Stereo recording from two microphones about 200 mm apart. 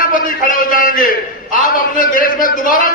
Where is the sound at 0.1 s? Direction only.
40° left (ahead or behind).